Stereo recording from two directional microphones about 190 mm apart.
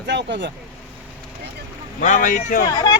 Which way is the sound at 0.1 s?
70° right (ahead or behind).